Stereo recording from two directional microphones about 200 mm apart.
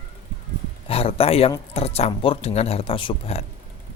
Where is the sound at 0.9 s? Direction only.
30° left (ahead or behind).